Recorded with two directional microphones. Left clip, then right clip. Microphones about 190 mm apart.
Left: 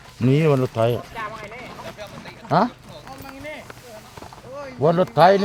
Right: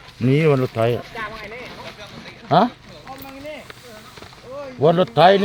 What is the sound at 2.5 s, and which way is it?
Speech, 5° right (ahead or behind).